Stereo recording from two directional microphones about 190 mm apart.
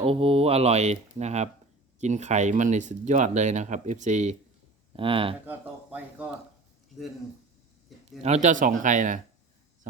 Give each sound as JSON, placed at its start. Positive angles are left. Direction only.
{"t": 0.0, "sound": "speech", "side_deg": -30}
{"t": 4.9, "sound": "speech", "side_deg": -30}
{"t": 5.5, "sound": "speech", "side_deg": -10}
{"t": 8.2, "sound": "speech", "side_deg": -35}